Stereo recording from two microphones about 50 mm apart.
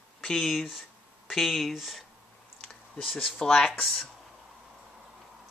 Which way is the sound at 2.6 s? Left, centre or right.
Centre.